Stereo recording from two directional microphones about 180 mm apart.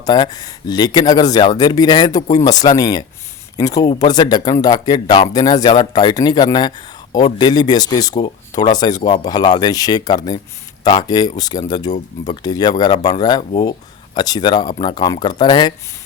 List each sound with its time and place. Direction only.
0.0 s speech: 25° left (ahead or behind)